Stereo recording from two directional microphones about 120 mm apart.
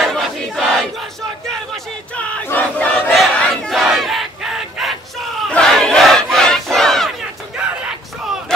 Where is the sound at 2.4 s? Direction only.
15° left (ahead or behind).